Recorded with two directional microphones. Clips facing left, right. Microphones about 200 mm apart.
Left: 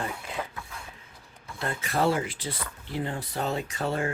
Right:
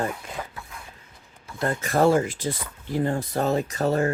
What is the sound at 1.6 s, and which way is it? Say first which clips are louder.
Speech: right 6 dB; 45° right (ahead or behind).